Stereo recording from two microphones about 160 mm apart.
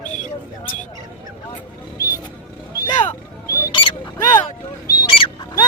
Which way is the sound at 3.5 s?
70° left (ahead or behind).